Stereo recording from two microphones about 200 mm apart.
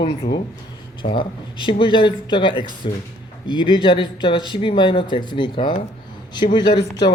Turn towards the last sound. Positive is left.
turn(degrees=20)  # may be behind; listen again after turning